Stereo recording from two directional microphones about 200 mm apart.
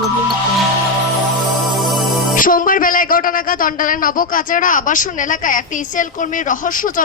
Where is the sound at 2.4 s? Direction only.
45° left (ahead or behind).